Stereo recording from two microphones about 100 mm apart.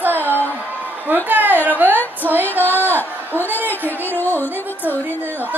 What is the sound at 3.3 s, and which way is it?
Speech, 20° right (ahead or behind).